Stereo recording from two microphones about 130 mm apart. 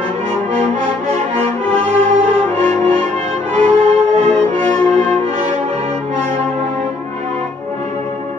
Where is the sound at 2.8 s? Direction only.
50° right (ahead or behind).